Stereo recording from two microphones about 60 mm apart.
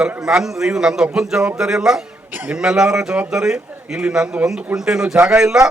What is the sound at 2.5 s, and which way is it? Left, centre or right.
A man's voice, centre.